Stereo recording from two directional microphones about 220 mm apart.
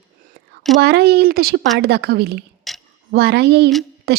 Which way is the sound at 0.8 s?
45° right (ahead or behind).